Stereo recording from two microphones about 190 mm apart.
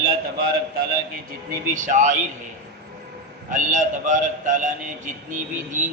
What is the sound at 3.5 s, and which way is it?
A man's voice, 40° right (ahead or behind).